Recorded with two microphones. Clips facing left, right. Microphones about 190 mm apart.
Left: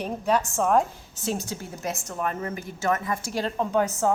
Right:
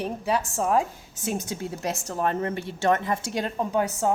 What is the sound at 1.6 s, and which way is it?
A woman's voice, 30° right (ahead or behind).